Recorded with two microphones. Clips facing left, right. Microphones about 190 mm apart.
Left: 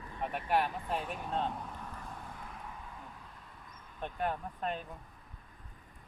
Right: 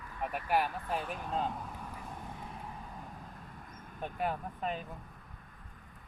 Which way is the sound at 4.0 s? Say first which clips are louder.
Even; 5° right (ahead or behind).